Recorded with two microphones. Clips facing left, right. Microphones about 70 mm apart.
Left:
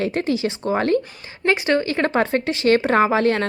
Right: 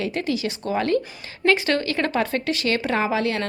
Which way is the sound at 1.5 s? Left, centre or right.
Left.